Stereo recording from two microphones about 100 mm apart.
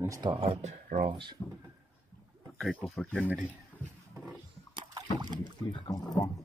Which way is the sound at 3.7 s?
25° left (ahead or behind).